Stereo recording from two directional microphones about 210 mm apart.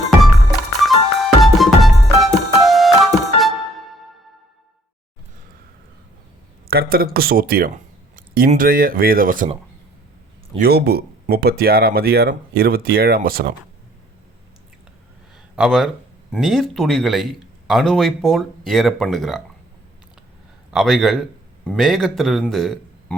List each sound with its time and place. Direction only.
0.8 s music: centre (ahead or behind)
6.7 s speech: 45° right (ahead or behind)
10.6 s speech: 50° right (ahead or behind)
15.5 s speech: centre (ahead or behind)
20.7 s a man's voice: centre (ahead or behind)